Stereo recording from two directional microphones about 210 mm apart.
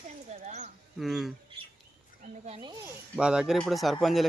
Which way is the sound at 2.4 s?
30° right (ahead or behind).